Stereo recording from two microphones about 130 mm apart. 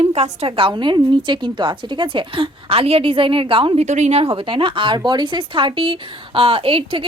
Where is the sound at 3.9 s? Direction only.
60° right (ahead or behind).